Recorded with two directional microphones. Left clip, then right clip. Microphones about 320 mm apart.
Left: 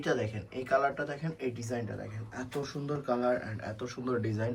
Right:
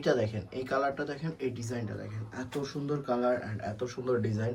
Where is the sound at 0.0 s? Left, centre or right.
Centre.